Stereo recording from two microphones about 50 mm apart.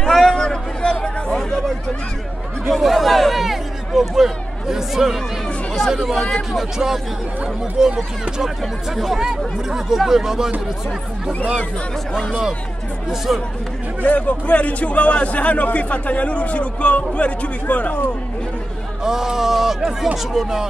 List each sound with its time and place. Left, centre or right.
0.0 s a sound: centre
2.7 s a sound: centre
5.8 s speech: centre
7.8 s speech: centre
13.3 s speech: centre
14.0 s a man's voice: left
19.0 s speech: centre